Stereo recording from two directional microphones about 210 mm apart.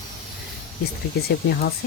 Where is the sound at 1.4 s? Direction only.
50° left (ahead or behind).